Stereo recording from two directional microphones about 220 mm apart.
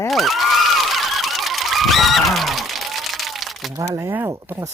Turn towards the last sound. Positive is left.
turn(degrees=-10)  # may be behind; listen again after turning